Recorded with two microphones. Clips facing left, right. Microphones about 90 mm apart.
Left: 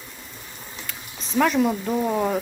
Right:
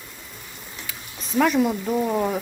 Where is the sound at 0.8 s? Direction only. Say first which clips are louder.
Even; centre (ahead or behind).